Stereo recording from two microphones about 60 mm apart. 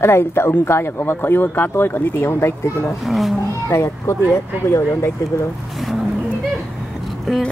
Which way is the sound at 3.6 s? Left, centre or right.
Left.